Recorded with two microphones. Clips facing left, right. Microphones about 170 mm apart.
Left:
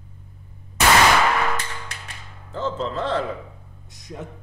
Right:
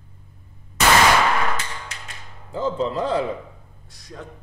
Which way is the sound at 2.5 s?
10° right (ahead or behind).